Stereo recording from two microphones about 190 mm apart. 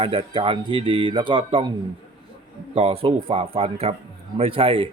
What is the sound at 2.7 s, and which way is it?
A man's voice, 30° right (ahead or behind).